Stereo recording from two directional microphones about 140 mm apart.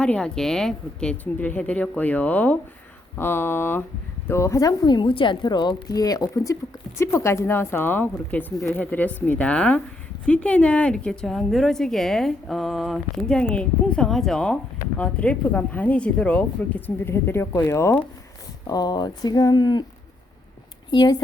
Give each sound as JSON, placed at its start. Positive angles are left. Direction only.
{"t": 0.0, "sound": "a woman's voice", "side_deg": 5}
{"t": 18.7, "sound": "speech", "side_deg": 30}
{"t": 20.9, "sound": "a woman's voice", "side_deg": 30}